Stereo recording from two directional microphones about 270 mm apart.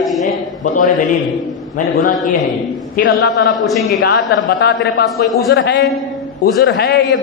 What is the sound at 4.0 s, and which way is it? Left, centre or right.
A man's voice, left.